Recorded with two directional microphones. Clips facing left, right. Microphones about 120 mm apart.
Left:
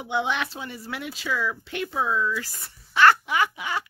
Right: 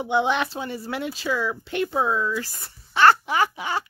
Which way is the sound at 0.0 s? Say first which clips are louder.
Right 4 dB; 30° right (ahead or behind).